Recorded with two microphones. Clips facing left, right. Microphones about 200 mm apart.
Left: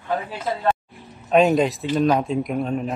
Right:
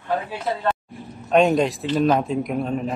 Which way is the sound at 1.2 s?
Centre (ahead or behind).